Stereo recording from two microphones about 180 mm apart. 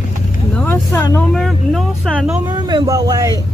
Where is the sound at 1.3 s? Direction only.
Centre (ahead or behind).